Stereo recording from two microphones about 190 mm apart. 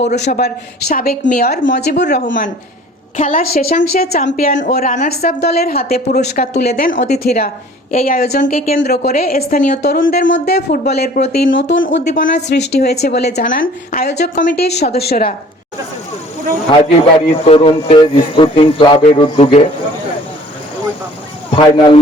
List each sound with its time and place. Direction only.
0.2 s a woman's voice: 55° left (ahead or behind)
1.6 s a woman's voice: 60° left (ahead or behind)
2.2 s a woman's voice: 45° left (ahead or behind)
10.2 s speech: 75° left (ahead or behind)
10.7 s a woman's voice: 55° left (ahead or behind); by 12.1 s 75° left (ahead or behind)
12.5 s a woman's voice: 60° left (ahead or behind)
17.2 s speech: 30° left (ahead or behind)
21.5 s speech: 30° left (ahead or behind)